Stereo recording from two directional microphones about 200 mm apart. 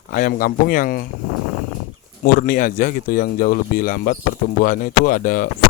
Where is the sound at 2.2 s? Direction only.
45° left (ahead or behind).